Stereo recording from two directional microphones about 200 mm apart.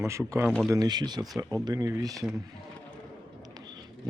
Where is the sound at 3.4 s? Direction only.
20° right (ahead or behind).